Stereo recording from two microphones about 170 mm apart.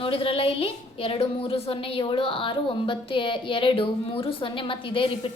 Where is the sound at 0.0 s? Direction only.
30° left (ahead or behind).